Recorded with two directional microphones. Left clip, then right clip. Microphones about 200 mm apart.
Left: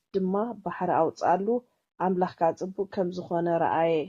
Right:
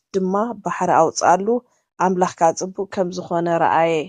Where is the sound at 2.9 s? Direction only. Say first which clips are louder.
Right 8 dB; 20° right (ahead or behind).